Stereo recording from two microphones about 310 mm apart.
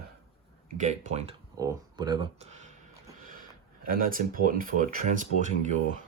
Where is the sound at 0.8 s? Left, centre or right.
Right.